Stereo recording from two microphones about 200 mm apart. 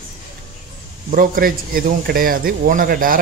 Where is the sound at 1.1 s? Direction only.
45° right (ahead or behind).